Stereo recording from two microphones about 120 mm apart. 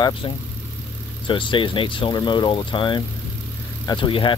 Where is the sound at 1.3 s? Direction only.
45° left (ahead or behind).